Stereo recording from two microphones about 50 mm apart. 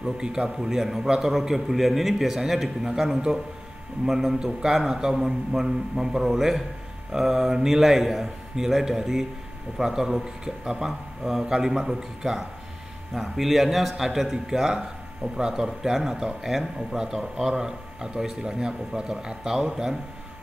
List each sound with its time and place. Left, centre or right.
0.0 s a man's voice: centre